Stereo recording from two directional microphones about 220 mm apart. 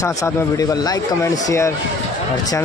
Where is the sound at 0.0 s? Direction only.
15° left (ahead or behind).